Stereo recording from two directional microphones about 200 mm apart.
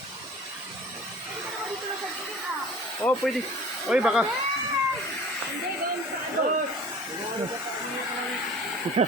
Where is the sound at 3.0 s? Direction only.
10° left (ahead or behind).